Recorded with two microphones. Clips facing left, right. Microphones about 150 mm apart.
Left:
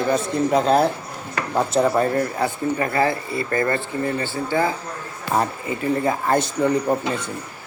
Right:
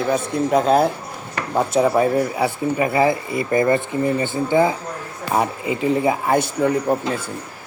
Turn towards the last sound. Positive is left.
turn(degrees=-5)  # may be behind; listen again after turning